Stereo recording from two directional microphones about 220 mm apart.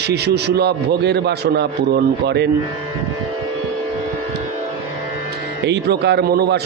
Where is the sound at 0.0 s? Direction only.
50° right (ahead or behind).